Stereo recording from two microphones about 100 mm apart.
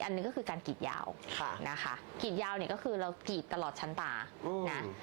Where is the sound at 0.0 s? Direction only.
20° right (ahead or behind).